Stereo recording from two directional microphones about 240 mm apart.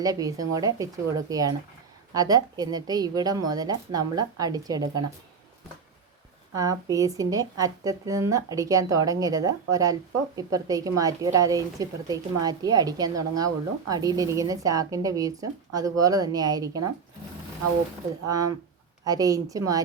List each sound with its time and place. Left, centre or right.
0.0 s a woman's voice: centre
6.6 s a woman's voice: centre
19.0 s a woman's voice: centre